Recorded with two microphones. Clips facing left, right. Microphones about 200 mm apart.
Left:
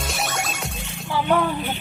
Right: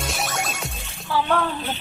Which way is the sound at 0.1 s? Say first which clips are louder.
Even; centre (ahead or behind).